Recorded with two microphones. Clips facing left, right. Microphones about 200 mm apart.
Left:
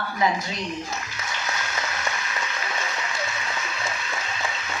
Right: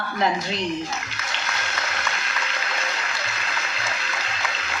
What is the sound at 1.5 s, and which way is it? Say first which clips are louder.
Applause: even; 75° right (ahead or behind).